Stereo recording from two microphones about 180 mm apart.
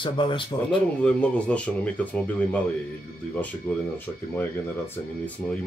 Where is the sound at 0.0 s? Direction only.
25° left (ahead or behind).